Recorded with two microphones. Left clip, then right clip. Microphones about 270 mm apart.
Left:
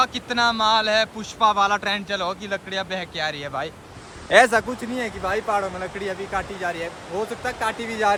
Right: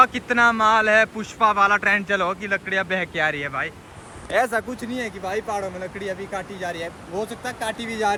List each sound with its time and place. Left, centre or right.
0.0 s speech: centre
4.3 s speech: left
4.8 s speech: centre